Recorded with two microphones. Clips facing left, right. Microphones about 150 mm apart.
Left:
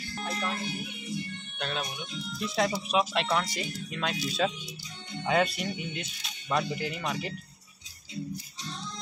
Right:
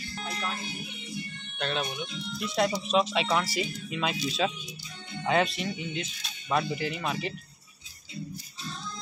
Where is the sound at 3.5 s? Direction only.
5° right (ahead or behind).